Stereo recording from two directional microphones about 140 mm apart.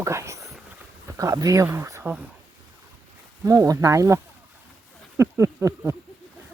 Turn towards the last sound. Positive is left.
turn(degrees=-20)  # may be behind; listen again after turning